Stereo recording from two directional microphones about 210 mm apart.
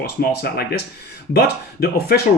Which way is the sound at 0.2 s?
45° left (ahead or behind).